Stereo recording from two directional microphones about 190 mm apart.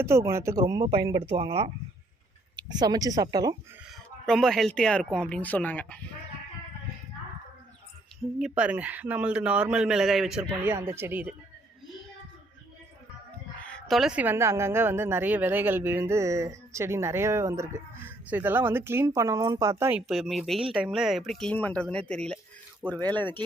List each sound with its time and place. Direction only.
0.0 s speech: 15° right (ahead or behind)
3.8 s speech: centre (ahead or behind)
8.4 s a woman's voice: 5° right (ahead or behind)
13.6 s a woman's voice: 5° left (ahead or behind)